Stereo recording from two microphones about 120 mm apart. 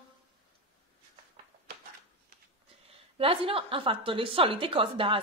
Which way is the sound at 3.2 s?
50° right (ahead or behind).